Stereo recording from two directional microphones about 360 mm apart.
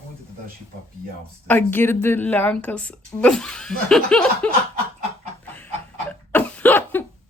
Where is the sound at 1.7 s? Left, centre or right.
Centre.